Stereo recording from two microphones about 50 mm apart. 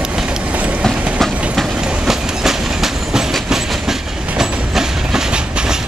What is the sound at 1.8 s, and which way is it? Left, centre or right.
Train, centre.